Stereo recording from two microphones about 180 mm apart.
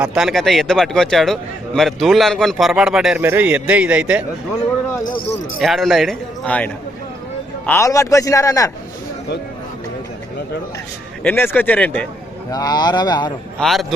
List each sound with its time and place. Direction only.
0.0 s a man's voice: centre (ahead or behind)
5.5 s a man's voice: centre (ahead or behind)
7.7 s a man's voice: 15° left (ahead or behind)
11.2 s a man's voice: 10° left (ahead or behind)
12.5 s a man's voice: 20° left (ahead or behind)
13.6 s a man's voice: centre (ahead or behind)